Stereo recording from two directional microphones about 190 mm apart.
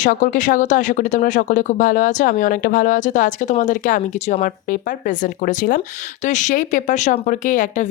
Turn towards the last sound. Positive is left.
turn(degrees=45)  # may be behind; listen again after turning